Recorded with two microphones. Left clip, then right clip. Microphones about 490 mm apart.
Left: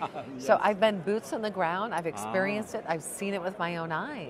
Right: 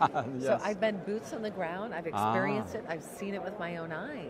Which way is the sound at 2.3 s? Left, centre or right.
Left.